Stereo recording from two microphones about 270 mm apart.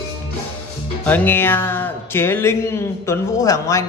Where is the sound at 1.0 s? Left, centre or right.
Centre.